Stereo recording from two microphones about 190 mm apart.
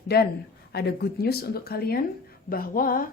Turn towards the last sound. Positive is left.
turn(degrees=50)  # may be behind; listen again after turning